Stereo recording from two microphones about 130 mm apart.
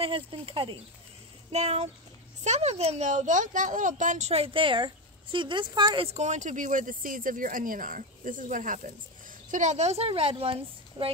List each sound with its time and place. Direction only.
0.0 s a woman's voice: 45° right (ahead or behind)
1.5 s a woman's voice: 55° right (ahead or behind); by 4.3 s 75° right (ahead or behind)
4.3 s a woman's voice: 45° right (ahead or behind)
6.0 s speech: 60° right (ahead or behind); by 8.9 s 85° right
9.5 s a woman's voice: 65° right (ahead or behind); by 11.1 s 45° right (ahead or behind)